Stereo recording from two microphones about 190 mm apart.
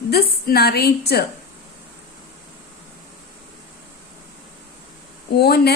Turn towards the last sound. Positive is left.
turn(degrees=60)  # may be behind; listen again after turning